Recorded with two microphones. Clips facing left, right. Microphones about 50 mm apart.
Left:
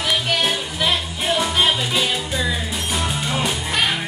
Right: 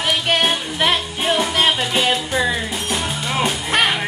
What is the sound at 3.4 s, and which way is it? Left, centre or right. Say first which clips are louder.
Music: right 5 dB; right.